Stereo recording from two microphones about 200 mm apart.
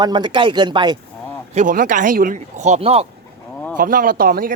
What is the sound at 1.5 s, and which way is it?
Speech, 40° right (ahead or behind).